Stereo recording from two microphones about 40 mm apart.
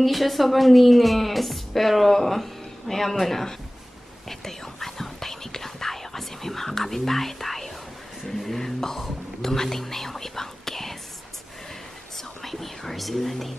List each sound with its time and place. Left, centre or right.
0.0 s speech: centre
4.3 s whispering: centre
12.4 s whispering: centre